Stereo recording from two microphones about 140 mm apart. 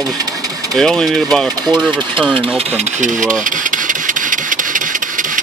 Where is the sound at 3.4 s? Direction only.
70° right (ahead or behind).